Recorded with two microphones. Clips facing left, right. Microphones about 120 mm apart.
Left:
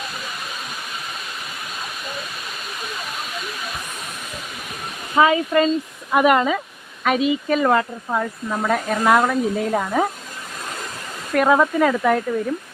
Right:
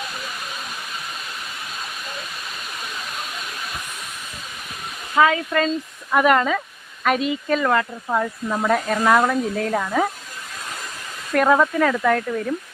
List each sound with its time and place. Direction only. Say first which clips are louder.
5.1 s speech: left 2 dB; 10° left (ahead or behind)
7.6 s speech: left 3 dB; 20° left (ahead or behind)
8.1 s speech: right 1 dB; centre (ahead or behind)
11.3 s speech: left 1 dB; 5° left (ahead or behind)